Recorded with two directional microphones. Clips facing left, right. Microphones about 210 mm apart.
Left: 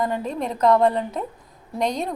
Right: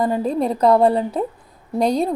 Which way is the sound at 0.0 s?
35° right (ahead or behind).